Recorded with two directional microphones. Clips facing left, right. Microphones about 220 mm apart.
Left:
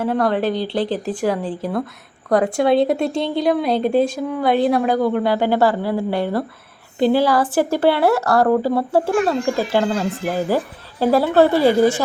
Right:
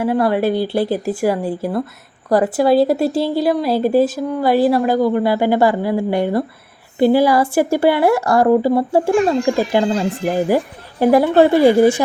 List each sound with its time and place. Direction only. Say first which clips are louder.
0.0 s a woman's voice: right 3 dB; 10° right (ahead or behind)